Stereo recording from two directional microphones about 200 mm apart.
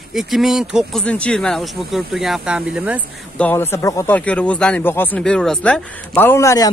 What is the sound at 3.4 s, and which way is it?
Speech, 10° left (ahead or behind).